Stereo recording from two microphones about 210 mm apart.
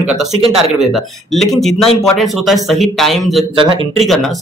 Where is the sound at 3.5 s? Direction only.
25° right (ahead or behind).